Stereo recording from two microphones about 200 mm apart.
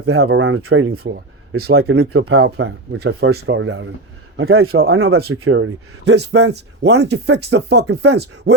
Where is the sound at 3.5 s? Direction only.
90° right.